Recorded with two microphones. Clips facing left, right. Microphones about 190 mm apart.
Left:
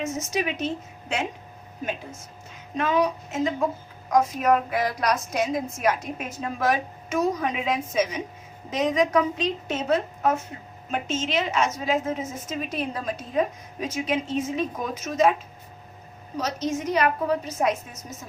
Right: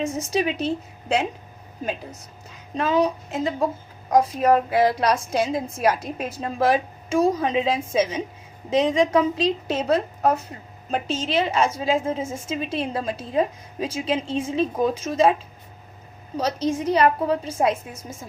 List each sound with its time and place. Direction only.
0.0 s a woman's voice: 30° right (ahead or behind)
2.7 s a woman's voice: 30° right (ahead or behind)
16.4 s a woman's voice: 30° right (ahead or behind)